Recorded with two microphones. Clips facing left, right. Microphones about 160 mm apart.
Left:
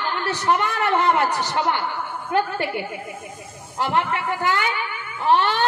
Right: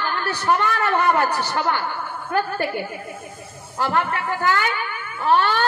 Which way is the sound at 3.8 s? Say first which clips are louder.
Even; 20° left (ahead or behind).